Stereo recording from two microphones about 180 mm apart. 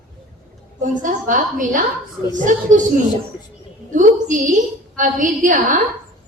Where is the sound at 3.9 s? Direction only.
45° right (ahead or behind).